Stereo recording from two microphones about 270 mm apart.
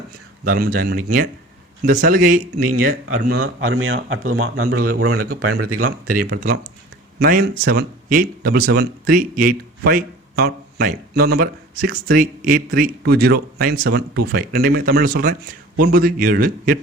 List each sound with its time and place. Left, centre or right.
0.5 s speech: right
3.3 s speech: right
6.1 s speech: right